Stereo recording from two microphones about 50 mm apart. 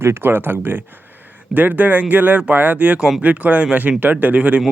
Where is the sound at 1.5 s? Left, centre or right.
Right.